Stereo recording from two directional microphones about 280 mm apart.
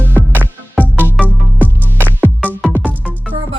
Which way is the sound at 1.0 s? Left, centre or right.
Centre.